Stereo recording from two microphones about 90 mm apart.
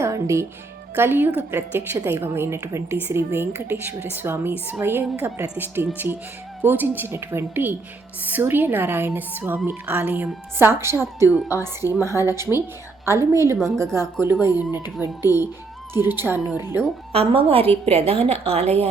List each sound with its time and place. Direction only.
0.0 s music: 30° right (ahead or behind)
0.9 s a woman's voice: 25° right (ahead or behind)
17.1 s a woman's voice: 90° right